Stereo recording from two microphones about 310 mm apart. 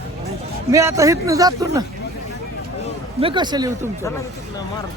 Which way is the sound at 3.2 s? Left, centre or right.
Centre.